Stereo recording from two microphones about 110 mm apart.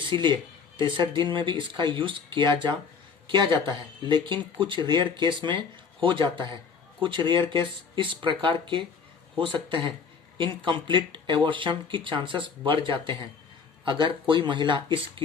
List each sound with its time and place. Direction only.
0.0 s speech: 45° right (ahead or behind)